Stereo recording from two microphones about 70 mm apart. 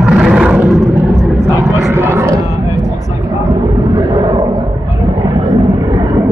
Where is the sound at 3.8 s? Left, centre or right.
Right.